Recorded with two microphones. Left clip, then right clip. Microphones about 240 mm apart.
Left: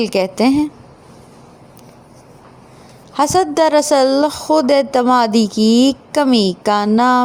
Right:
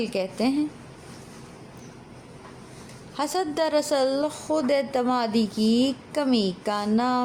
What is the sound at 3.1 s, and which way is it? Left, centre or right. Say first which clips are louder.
Speech: left 12 dB; left.